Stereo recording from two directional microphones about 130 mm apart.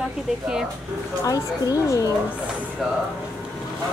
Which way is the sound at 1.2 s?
25° left (ahead or behind).